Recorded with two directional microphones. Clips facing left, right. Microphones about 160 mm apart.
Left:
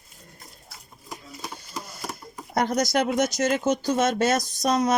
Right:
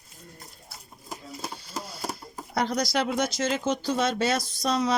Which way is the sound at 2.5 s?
50° left (ahead or behind).